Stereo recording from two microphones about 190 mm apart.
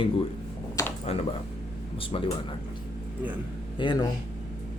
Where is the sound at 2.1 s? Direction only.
30° left (ahead or behind).